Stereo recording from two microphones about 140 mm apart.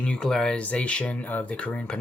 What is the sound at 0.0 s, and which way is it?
Speech, 5° left (ahead or behind).